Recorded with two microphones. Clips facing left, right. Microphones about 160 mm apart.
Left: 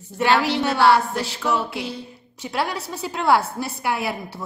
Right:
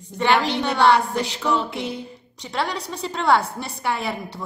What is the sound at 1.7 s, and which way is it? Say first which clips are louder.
Speech: right 1 dB; 20° right (ahead or behind).